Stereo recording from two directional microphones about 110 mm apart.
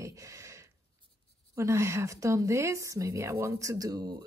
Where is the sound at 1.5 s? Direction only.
25° right (ahead or behind).